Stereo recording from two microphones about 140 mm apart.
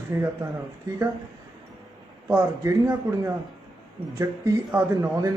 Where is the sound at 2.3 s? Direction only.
20° right (ahead or behind).